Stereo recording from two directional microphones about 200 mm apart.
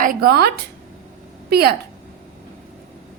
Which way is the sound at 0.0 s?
45° right (ahead or behind).